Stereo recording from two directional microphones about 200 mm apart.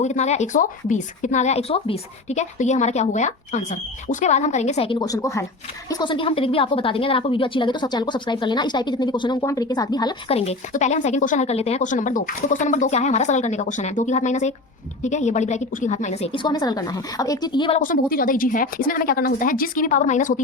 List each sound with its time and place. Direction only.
0.0 s a woman's voice: 35° left (ahead or behind)
17.7 s speech: 45° left (ahead or behind)